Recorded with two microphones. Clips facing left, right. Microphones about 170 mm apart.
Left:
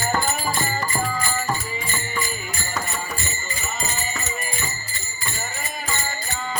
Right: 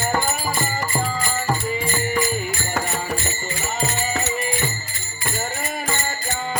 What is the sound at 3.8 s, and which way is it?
Music, 70° right (ahead or behind).